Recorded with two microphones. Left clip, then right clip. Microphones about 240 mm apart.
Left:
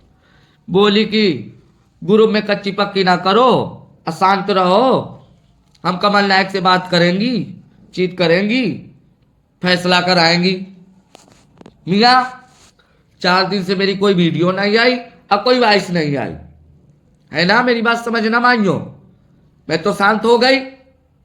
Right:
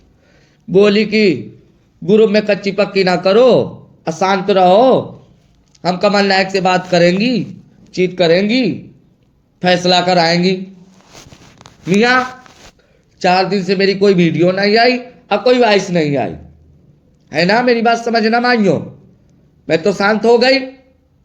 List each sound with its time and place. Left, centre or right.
0.7 s a man's voice: centre
11.9 s a man's voice: centre